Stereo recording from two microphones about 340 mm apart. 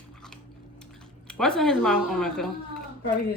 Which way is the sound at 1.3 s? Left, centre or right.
Centre.